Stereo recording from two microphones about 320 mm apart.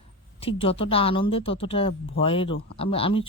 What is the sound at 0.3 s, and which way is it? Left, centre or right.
Speech, centre.